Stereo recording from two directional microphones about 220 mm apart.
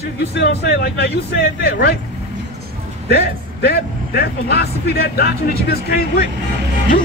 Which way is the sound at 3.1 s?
45° left (ahead or behind).